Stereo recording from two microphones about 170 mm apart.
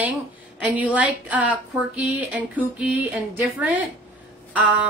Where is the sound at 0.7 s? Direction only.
10° right (ahead or behind).